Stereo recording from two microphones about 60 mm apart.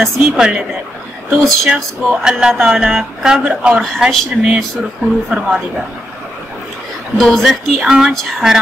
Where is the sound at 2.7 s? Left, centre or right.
Centre.